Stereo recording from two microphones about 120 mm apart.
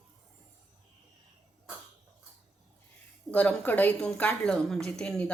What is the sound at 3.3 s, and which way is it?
A woman's voice, 10° left (ahead or behind).